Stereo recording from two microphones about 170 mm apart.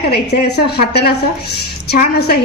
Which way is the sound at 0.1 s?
70° left (ahead or behind).